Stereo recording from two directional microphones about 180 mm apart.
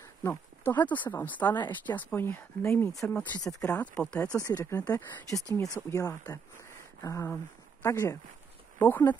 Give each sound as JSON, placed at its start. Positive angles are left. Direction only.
{"t": 0.3, "sound": "speech", "side_deg": 10}
{"t": 4.5, "sound": "speech", "side_deg": 20}